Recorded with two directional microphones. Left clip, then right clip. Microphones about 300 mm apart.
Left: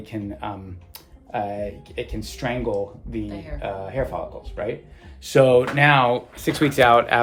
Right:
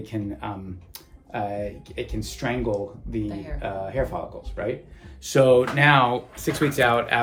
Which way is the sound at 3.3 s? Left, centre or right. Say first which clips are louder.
Right 1 dB; centre.